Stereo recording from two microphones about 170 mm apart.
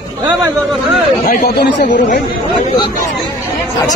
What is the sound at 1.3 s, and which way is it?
Speech, 60° left (ahead or behind).